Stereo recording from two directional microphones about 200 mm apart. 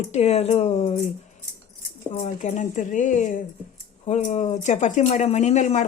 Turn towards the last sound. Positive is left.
turn(degrees=35)  # may be behind; listen again after turning